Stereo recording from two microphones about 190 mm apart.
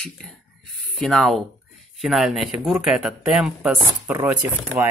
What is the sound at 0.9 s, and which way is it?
Speech, centre (ahead or behind).